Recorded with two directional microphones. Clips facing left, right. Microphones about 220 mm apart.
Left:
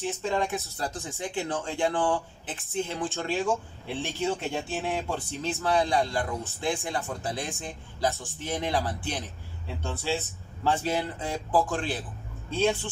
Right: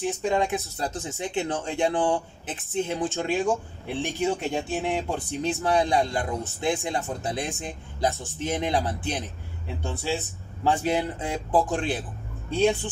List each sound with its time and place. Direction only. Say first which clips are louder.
0.0 s speech: right 4 dB; 15° right (ahead or behind)